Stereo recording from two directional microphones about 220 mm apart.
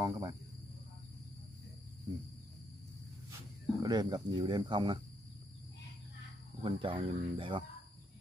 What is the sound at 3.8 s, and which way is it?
Speech, 20° right (ahead or behind).